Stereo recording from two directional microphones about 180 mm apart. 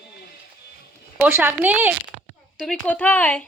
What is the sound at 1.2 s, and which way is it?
Speech, 10° right (ahead or behind).